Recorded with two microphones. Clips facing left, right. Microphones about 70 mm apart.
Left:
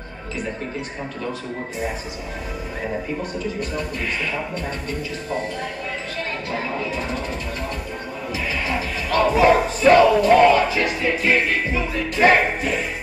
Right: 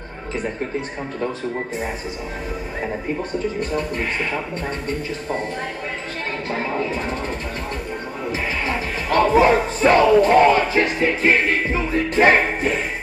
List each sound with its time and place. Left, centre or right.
3.7 s speech: right
8.3 s music: right